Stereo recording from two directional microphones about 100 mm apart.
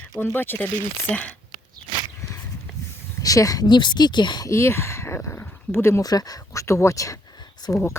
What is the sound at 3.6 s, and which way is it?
Speech, 50° left (ahead or behind).